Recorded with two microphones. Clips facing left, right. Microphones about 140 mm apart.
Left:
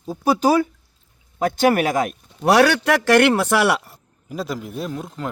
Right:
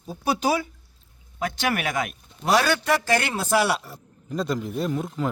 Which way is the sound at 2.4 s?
75° left (ahead or behind).